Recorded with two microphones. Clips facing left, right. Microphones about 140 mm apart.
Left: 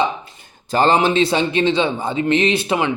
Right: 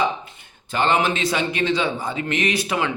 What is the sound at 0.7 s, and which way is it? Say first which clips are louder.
A man's voice: left 5 dB; 35° left (ahead or behind).